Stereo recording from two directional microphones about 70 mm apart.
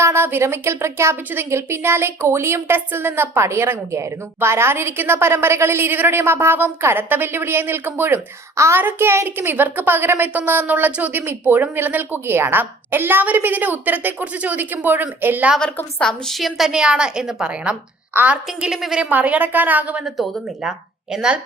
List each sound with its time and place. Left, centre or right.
0.0 s a woman's voice: right
8.5 s a child's voice: right
8.8 s a woman's voice: right
16.0 s a woman's voice: centre
18.1 s a woman's voice: right
18.6 s a woman's voice: centre
19.1 s speech: right
20.1 s a woman's voice: centre